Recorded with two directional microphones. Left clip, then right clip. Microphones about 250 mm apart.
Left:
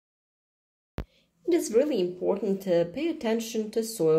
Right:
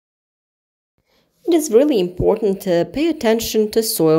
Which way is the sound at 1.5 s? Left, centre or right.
Right.